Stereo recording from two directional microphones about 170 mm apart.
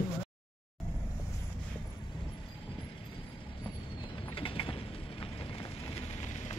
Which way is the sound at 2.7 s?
30° left (ahead or behind).